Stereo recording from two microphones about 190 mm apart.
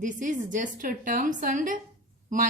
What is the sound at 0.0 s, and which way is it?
A woman's voice, 40° right (ahead or behind).